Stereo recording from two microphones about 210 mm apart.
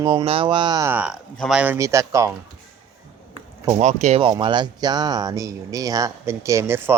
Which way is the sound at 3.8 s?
35° right (ahead or behind).